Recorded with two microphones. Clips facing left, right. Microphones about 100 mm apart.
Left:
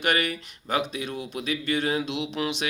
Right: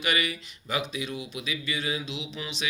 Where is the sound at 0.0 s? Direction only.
55° left (ahead or behind).